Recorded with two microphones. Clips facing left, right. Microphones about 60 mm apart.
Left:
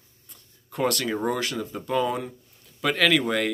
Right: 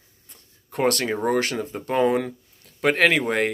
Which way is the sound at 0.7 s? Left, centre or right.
Right.